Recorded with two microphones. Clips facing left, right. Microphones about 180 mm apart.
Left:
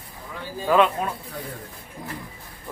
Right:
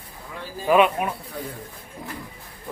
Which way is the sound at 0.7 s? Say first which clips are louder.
Right 1 dB; 15° right (ahead or behind).